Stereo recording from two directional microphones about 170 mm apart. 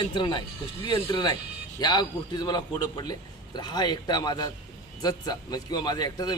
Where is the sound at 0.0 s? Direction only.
30° left (ahead or behind).